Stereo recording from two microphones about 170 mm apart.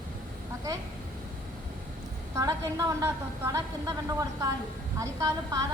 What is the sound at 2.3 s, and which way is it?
A woman's voice, 20° right (ahead or behind).